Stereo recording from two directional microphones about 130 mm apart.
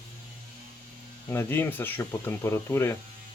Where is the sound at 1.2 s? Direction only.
20° left (ahead or behind).